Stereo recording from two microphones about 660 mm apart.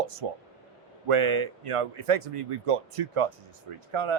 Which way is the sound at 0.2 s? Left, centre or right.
Right.